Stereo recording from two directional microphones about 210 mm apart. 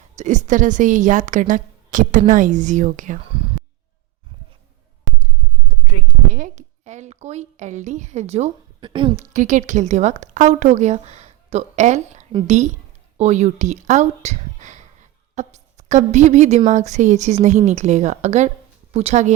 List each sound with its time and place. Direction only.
0.2 s a woman's voice: 35° right (ahead or behind)
6.3 s a woman's voice: 35° right (ahead or behind)
9.3 s a woman's voice: 35° right (ahead or behind)